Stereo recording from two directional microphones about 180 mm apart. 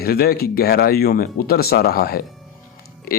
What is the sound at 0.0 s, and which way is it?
Speech, 60° left (ahead or behind).